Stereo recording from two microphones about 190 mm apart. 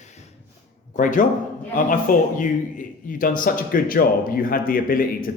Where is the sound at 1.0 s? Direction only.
45° left (ahead or behind).